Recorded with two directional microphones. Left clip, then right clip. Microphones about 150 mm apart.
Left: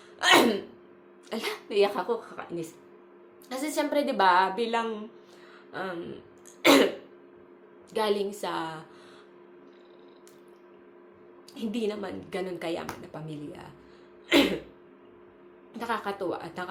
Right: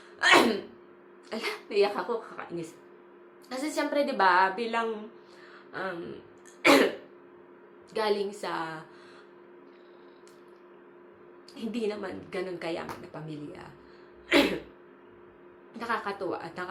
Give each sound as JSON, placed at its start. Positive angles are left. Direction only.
{"t": 0.2, "sound": "sneeze", "side_deg": 50}
{"t": 1.3, "sound": "a woman's voice", "side_deg": 50}
{"t": 6.6, "sound": "throat clearing", "side_deg": 50}
{"t": 7.9, "sound": "a woman's voice", "side_deg": 50}
{"t": 11.5, "sound": "a woman's voice", "side_deg": 50}
{"t": 14.3, "sound": "a sound", "side_deg": 50}
{"t": 15.7, "sound": "a woman's voice", "side_deg": 50}